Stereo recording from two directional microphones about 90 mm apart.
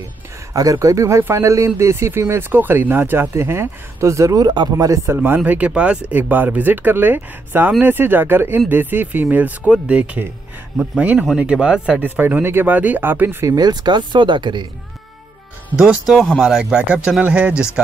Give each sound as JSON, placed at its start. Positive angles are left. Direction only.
{"t": 0.5, "sound": "speech", "side_deg": -40}
{"t": 5.1, "sound": "speech", "side_deg": -25}
{"t": 12.2, "sound": "speech", "side_deg": -20}
{"t": 13.5, "sound": "speech", "side_deg": -50}
{"t": 15.7, "sound": "speech", "side_deg": -10}
{"t": 16.7, "sound": "speech", "side_deg": -10}